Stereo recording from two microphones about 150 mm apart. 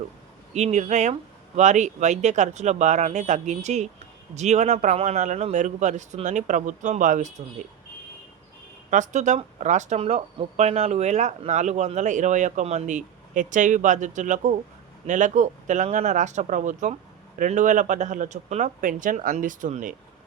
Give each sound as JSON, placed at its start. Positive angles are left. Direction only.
{"t": 0.5, "sound": "speech", "side_deg": -50}
{"t": 8.9, "sound": "speech", "side_deg": -55}